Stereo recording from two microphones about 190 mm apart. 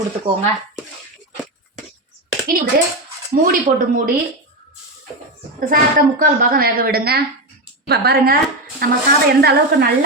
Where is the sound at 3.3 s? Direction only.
50° right (ahead or behind).